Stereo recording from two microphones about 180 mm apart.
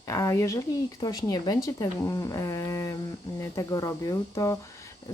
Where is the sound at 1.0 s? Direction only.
20° left (ahead or behind).